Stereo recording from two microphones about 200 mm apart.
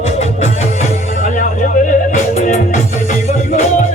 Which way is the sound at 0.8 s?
35° left (ahead or behind).